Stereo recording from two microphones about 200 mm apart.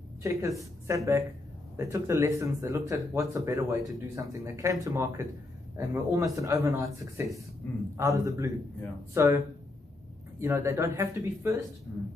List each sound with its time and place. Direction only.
0.2 s a woman's voice: 15° right (ahead or behind)
7.6 s a man's voice: 10° left (ahead or behind)
8.0 s speech: 15° right (ahead or behind)
10.4 s speech: 15° right (ahead or behind)